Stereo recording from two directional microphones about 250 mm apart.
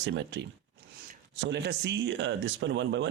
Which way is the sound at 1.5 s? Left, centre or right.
Right.